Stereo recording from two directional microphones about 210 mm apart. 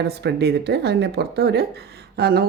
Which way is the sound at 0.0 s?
50° right (ahead or behind).